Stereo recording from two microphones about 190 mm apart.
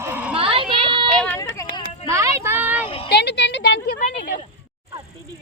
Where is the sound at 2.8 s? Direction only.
30° left (ahead or behind).